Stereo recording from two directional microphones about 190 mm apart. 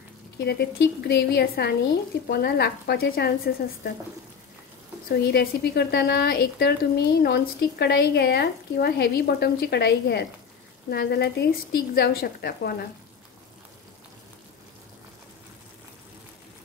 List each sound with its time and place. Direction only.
0.4 s speech: 60° left (ahead or behind)
5.1 s speech: 55° left (ahead or behind)